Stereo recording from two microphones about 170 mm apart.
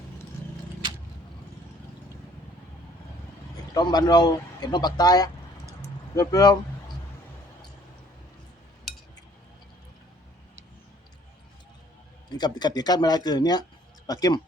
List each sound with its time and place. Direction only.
3.8 s speech: 25° left (ahead or behind)
12.3 s speech: 25° left (ahead or behind)